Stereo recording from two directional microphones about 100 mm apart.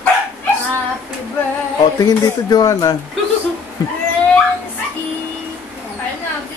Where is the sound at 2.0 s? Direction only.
40° left (ahead or behind).